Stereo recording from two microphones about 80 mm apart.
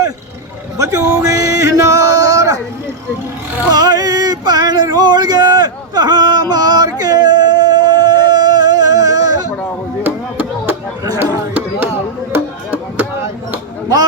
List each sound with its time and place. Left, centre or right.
0.8 s music: right
3.7 s male singing: right
10.0 s chopping: right
11.2 s a sound: right
12.3 s music: right